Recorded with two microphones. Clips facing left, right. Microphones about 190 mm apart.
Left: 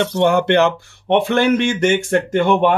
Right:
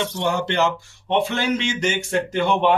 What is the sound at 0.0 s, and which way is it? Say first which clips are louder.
Speech: left 8 dB; 60° left (ahead or behind).